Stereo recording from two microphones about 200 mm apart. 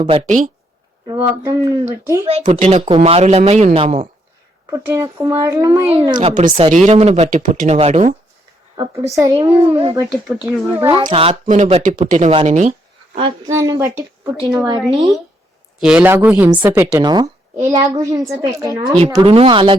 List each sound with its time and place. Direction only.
0.3 s speech: 40° right (ahead or behind)
1.0 s speech: 25° right (ahead or behind)
2.4 s speech: 35° right (ahead or behind)
4.6 s speech: 15° right (ahead or behind)
5.9 s speech: 30° right (ahead or behind)
6.2 s speech: 40° right (ahead or behind)
8.7 s speech: 15° right (ahead or behind)
10.9 s speech: 25° right (ahead or behind)
13.5 s speech: 15° right (ahead or behind)
15.8 s a woman's voice: 5° right (ahead or behind); by 19.7 s 25° right (ahead or behind)